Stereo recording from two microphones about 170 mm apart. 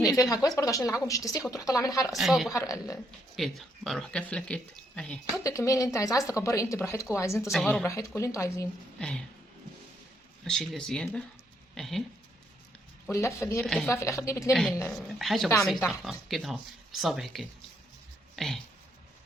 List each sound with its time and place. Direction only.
0.1 s speech: 20° left (ahead or behind)
2.1 s speech: centre (ahead or behind)
2.5 s speech: 20° left (ahead or behind)
3.3 s speech: centre (ahead or behind)
5.4 s speech: 20° left (ahead or behind)
7.5 s speech: centre (ahead or behind)
7.9 s speech: 15° left (ahead or behind)
9.0 s a sound: 5° left (ahead or behind)
10.4 s speech: 5° left (ahead or behind)
13.1 s speech: 15° left (ahead or behind)
13.6 s speech: centre (ahead or behind)
13.9 s speech: 15° left (ahead or behind)
14.8 s speech: centre (ahead or behind)